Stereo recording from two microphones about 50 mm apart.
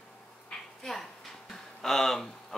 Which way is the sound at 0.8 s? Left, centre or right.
Centre.